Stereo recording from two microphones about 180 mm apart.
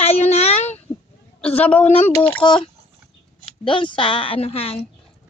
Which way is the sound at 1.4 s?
5° left (ahead or behind).